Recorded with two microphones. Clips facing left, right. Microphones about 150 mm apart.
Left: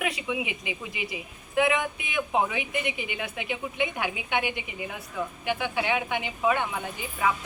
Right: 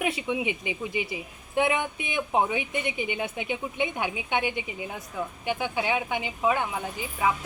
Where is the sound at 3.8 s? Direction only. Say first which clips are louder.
Even; 25° right (ahead or behind).